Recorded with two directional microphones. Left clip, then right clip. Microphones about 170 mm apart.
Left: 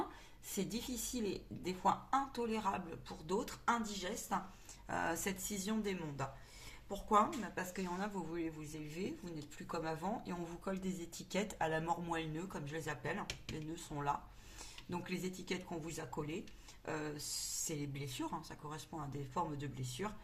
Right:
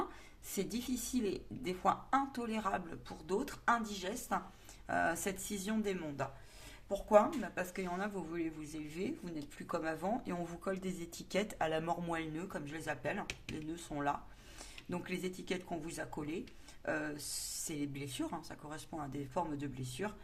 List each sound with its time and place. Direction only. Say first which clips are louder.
0.5 s speech: right 3 dB; 25° right (ahead or behind)